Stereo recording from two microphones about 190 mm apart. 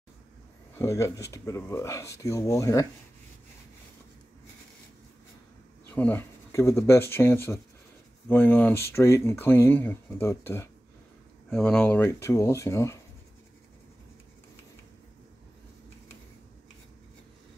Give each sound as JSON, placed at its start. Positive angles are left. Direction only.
{"t": 0.7, "sound": "speech", "side_deg": 15}
{"t": 5.9, "sound": "speech", "side_deg": 10}